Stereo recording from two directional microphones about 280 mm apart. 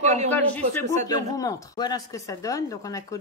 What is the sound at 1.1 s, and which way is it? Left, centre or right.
Speech, centre.